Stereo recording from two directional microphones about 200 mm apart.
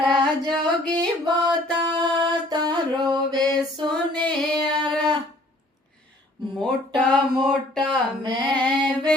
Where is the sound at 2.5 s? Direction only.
20° right (ahead or behind).